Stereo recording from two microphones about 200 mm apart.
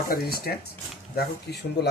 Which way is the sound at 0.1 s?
50° left (ahead or behind).